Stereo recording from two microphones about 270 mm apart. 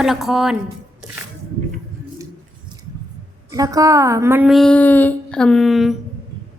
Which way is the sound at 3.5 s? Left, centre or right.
Centre.